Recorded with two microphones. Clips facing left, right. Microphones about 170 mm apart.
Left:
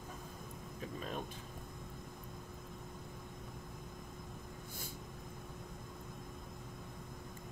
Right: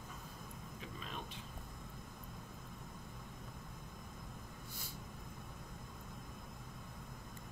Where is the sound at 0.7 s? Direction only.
45° left (ahead or behind).